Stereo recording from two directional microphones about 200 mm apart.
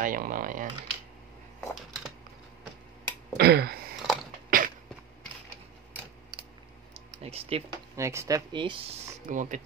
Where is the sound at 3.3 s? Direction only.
50° right (ahead or behind).